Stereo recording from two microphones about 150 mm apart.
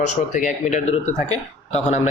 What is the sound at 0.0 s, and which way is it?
A man's voice, 55° left (ahead or behind).